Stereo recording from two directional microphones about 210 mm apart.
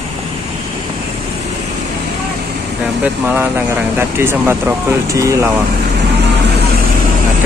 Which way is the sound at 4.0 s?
10° right (ahead or behind).